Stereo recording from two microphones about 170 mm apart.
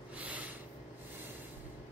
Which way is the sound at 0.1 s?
10° right (ahead or behind).